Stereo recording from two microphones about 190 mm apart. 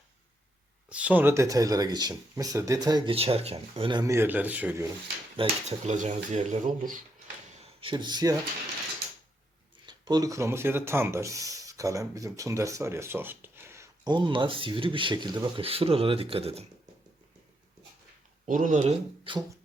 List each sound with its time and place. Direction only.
0.9 s speech: 5° right (ahead or behind)
5.4 s speech: 35° right (ahead or behind)
7.6 s speech: 25° right (ahead or behind)
9.8 s speech: 20° right (ahead or behind)
18.4 s speech: 45° right (ahead or behind); by 19.5 s 25° right (ahead or behind)